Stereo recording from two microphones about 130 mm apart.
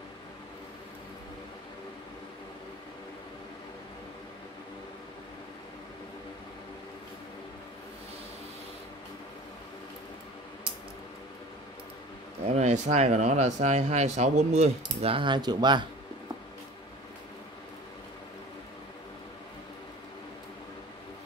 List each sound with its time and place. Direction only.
12.4 s speech: 60° right (ahead or behind); by 15.9 s 35° right (ahead or behind)